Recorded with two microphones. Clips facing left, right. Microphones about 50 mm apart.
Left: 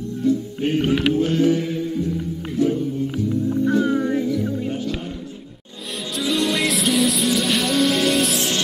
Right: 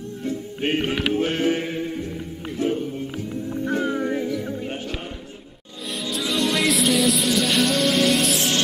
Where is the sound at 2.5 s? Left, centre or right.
Right.